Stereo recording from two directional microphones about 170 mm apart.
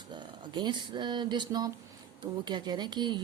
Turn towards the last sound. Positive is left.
turn(degrees=-25)  # may be behind; listen again after turning